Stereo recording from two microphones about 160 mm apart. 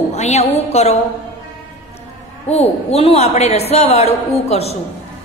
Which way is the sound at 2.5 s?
40° left (ahead or behind).